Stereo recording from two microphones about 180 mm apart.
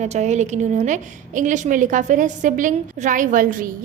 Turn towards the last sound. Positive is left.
turn(degrees=-50)  # may be behind; listen again after turning